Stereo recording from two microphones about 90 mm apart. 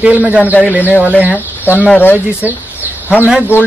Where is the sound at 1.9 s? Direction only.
20° left (ahead or behind).